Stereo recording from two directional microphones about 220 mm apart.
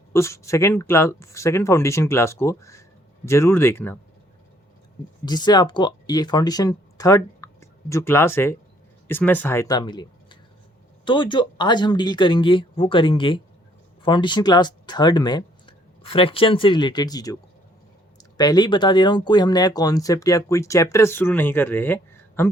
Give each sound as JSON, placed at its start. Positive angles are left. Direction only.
{"t": 0.1, "sound": "speech", "side_deg": 15}
{"t": 5.2, "sound": "speech", "side_deg": 20}
{"t": 18.3, "sound": "speech", "side_deg": 20}